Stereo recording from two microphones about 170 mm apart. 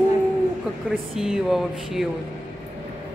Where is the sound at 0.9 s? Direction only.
5° right (ahead or behind).